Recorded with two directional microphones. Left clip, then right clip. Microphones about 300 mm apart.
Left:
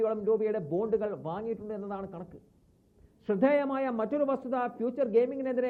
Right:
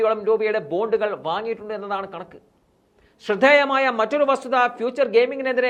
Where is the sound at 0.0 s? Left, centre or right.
Centre.